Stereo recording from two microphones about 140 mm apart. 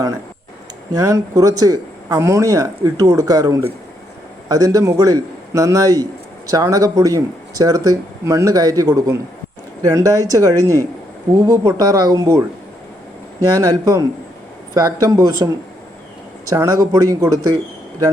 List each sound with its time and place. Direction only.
0.9 s speech: 25° right (ahead or behind)